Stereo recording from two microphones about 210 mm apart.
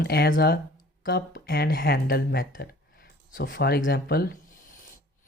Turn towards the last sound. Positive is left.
turn(degrees=45)  # may be behind; listen again after turning